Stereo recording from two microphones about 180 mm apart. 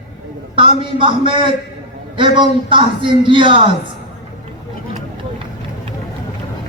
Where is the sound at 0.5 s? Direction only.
30° right (ahead or behind).